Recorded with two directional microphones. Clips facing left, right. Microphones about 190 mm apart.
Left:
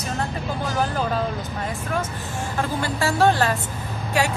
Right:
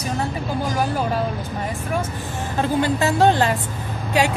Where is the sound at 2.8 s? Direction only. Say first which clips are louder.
Right 2 dB; 20° right (ahead or behind).